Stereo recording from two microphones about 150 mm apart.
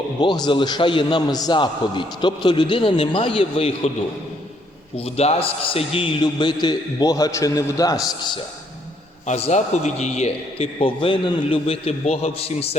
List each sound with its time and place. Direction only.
0.2 s a man's voice: 30° left (ahead or behind)
4.9 s a man's voice: 40° left (ahead or behind); by 7.9 s 25° left (ahead or behind)
9.2 s a man's voice: 45° left (ahead or behind)